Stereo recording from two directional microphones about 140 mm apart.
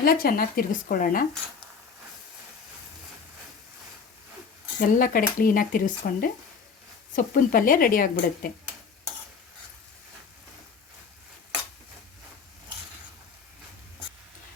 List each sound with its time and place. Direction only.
0.0 s speech: 90° left
4.8 s speech: 75° left (ahead or behind)
5.4 s speech: 90° left